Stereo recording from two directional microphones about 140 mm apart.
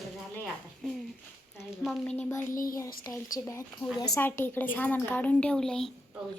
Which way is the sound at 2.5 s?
80° left.